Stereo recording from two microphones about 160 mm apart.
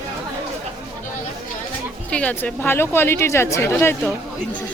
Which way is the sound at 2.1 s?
10° left (ahead or behind).